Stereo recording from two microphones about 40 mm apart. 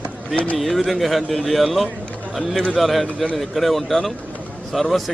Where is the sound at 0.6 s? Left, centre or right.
Centre.